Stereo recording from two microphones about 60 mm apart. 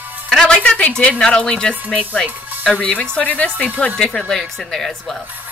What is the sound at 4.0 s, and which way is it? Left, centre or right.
Speech, centre.